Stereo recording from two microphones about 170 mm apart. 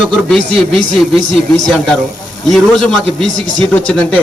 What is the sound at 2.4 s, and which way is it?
A man's voice, centre (ahead or behind).